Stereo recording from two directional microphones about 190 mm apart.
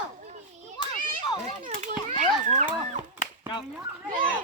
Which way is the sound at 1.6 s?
40° right (ahead or behind).